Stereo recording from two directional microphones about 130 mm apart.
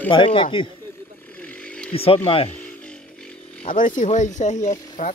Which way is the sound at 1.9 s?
45° left (ahead or behind).